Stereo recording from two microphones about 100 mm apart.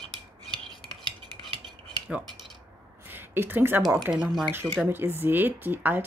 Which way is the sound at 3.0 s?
20° right (ahead or behind).